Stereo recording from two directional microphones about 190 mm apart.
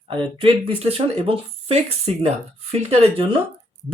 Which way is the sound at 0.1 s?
25° right (ahead or behind).